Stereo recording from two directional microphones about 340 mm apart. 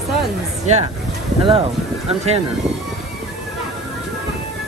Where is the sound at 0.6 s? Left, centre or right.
Centre.